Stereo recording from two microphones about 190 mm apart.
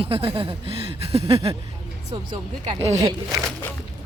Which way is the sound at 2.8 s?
35° right (ahead or behind).